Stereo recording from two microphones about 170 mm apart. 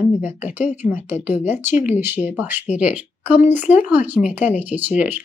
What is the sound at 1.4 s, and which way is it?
Speech, 10° right (ahead or behind).